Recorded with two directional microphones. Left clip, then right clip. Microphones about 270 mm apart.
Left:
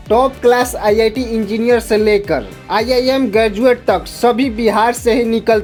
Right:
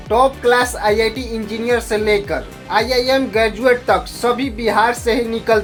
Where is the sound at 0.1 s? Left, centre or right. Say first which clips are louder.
Left 2 dB; left.